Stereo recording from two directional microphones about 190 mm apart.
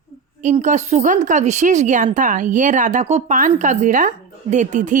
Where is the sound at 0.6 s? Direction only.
40° right (ahead or behind).